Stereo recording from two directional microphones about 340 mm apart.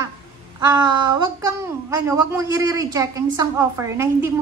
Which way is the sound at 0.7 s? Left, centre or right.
Centre.